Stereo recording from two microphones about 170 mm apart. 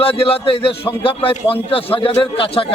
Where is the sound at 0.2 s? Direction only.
35° left (ahead or behind).